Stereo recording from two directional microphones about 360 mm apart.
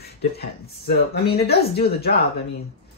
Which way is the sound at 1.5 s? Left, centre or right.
Left.